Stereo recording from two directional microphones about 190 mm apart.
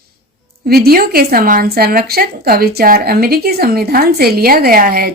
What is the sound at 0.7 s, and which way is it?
Speech, 55° right (ahead or behind).